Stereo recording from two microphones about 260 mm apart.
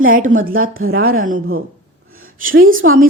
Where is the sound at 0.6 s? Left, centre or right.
Right.